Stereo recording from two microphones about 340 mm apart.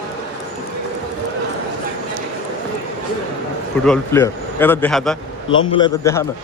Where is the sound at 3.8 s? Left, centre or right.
Centre.